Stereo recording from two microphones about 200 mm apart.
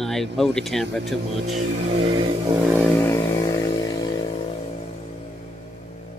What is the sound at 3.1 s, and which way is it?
Vehicle, 20° left (ahead or behind).